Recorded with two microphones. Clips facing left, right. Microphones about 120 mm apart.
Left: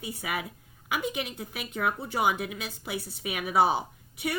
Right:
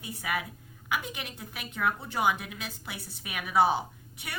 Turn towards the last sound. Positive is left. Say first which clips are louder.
# left 1 dB
turn(degrees=15)  # may be behind; listen again after turning